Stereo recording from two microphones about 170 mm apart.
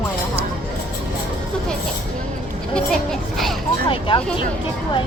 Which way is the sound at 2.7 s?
Centre (ahead or behind).